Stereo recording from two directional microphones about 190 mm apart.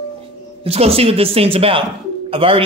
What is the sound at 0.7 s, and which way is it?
Speech, 30° right (ahead or behind).